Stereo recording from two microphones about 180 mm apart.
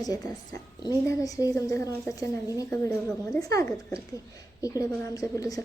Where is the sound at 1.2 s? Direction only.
20° left (ahead or behind).